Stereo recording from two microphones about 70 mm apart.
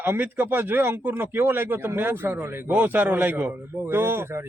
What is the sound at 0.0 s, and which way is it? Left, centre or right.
Speech, right.